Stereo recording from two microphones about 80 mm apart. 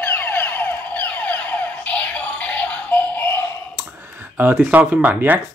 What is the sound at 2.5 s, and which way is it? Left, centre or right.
Music, centre.